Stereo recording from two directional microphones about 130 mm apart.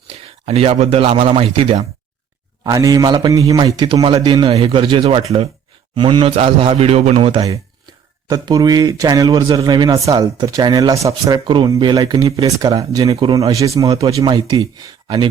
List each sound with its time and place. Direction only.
0.1 s a man's voice: 50° right (ahead or behind)
2.6 s a man's voice: 30° right (ahead or behind)
3.8 s a man's voice: 35° right (ahead or behind)
8.3 s speech: 30° right (ahead or behind)